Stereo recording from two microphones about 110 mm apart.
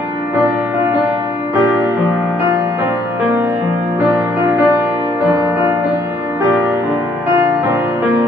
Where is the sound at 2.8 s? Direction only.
15° right (ahead or behind).